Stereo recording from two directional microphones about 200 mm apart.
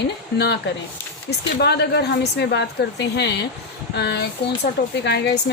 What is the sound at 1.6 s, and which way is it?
A woman's voice, 55° left (ahead or behind).